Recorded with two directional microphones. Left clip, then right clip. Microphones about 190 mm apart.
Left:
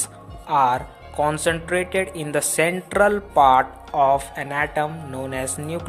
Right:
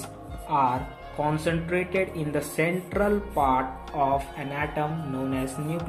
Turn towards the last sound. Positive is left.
turn(degrees=55)  # may be behind; listen again after turning